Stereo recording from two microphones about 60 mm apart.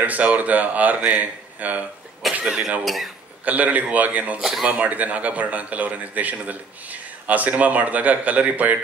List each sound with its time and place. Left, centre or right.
0.0 s a man's voice: right
2.3 s cough: centre
2.8 s speech: centre
3.4 s a man's voice: right
4.4 s speech: centre
4.7 s a man's voice: right